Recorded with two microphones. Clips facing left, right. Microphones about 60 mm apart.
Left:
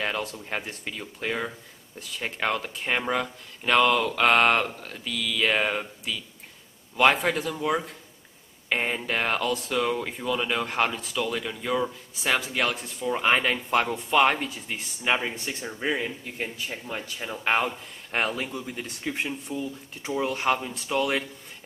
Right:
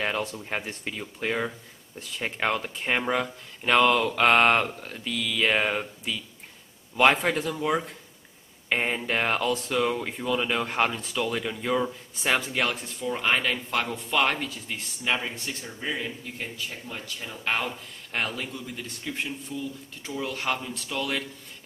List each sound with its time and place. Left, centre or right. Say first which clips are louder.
0.0 s speech: right 1 dB; centre